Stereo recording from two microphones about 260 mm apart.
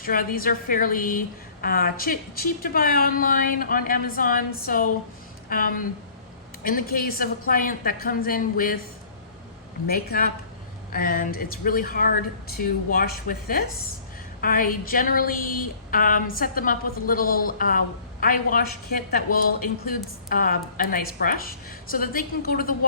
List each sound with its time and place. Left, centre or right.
0.0 s a woman's voice: left
9.8 s a woman's voice: left